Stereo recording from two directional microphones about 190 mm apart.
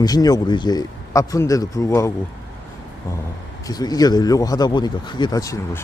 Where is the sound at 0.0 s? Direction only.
20° left (ahead or behind).